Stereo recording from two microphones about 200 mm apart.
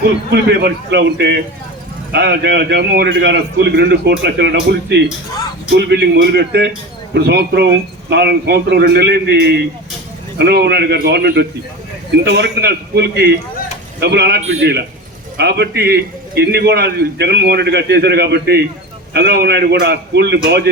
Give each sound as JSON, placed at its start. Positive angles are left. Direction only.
{"t": 0.0, "sound": "a man's voice", "side_deg": -55}